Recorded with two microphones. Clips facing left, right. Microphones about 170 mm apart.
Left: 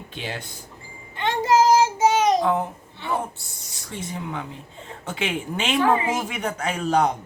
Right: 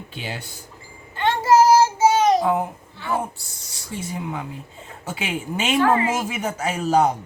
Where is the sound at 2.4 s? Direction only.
10° right (ahead or behind).